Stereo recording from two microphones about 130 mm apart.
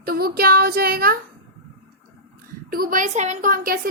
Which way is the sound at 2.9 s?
80° right.